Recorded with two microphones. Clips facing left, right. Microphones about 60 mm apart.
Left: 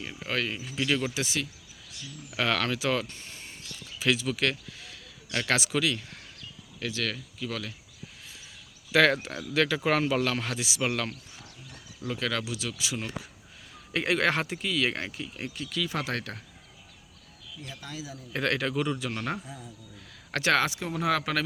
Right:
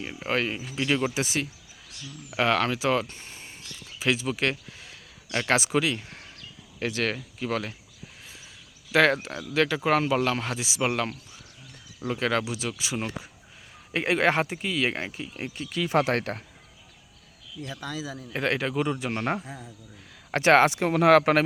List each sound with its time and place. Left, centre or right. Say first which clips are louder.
0.0 s speech: right 4 dB; right
0.5 s speech: right 2 dB; centre
1.2 s speech: right 3 dB; right
2.3 s speech: right 4 dB; centre
6.7 s speech: right 5 dB; right
8.9 s speech: right 1 dB; centre
9.2 s speech: right 2 dB; centre
11.9 s speech: right 5 dB; right
15.9 s speech: right 8 dB; right
17.6 s speech: right 6 dB; right
18.3 s speech: right 1 dB; centre
18.9 s speech: right 4 dB; right
20.7 s speech: right 9 dB; right